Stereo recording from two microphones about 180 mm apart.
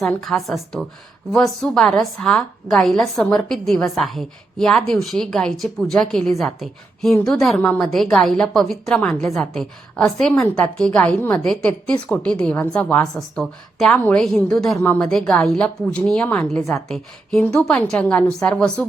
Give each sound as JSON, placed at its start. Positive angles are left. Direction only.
{"t": 0.0, "sound": "a woman's voice", "side_deg": 0}